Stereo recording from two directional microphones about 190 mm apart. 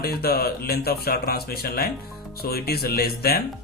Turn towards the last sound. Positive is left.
turn(degrees=55)  # may be behind; listen again after turning